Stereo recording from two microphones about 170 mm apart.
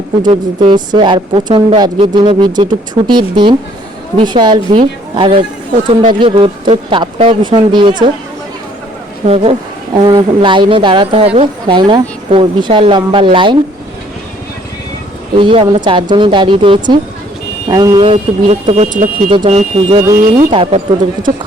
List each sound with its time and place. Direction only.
0.2 s a woman's voice: 30° right (ahead or behind)
9.2 s a woman's voice: 35° right (ahead or behind)
15.4 s a woman's voice: 30° right (ahead or behind)
18.6 s speech: 40° right (ahead or behind)
19.3 s speech: 35° right (ahead or behind)